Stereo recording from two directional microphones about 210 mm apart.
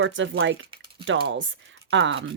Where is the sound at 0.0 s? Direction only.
65° right (ahead or behind).